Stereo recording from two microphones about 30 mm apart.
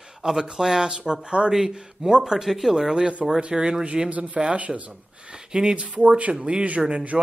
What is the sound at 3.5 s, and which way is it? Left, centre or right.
Speech, right.